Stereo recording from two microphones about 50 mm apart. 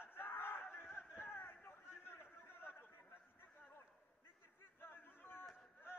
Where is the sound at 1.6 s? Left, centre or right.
Left.